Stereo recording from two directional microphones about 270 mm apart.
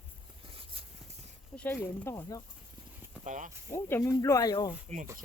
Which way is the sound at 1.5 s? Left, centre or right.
Centre.